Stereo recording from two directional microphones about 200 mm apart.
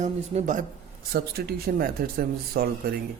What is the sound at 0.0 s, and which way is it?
Speech, 35° right (ahead or behind).